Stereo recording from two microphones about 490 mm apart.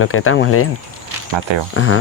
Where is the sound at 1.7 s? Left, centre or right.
Left.